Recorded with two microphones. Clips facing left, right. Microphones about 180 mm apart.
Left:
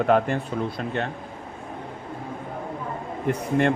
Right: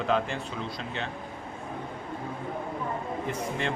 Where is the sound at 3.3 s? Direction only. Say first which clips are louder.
Left 12 dB; 55° left (ahead or behind).